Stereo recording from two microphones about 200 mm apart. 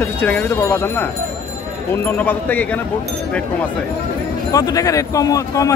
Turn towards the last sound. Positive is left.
turn(degrees=15)  # may be behind; listen again after turning